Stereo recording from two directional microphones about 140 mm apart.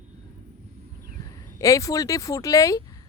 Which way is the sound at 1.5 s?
25° left (ahead or behind).